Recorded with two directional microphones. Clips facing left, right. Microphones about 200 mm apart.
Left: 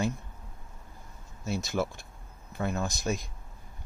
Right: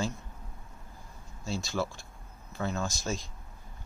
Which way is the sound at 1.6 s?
20° left (ahead or behind).